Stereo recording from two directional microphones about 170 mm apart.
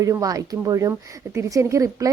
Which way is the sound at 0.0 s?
20° right (ahead or behind).